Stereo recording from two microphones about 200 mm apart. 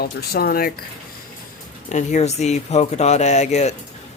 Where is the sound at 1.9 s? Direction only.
35° left (ahead or behind).